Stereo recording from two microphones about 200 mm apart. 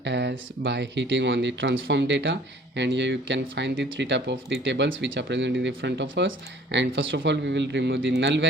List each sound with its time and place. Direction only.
0.0 s speech: 60° right (ahead or behind)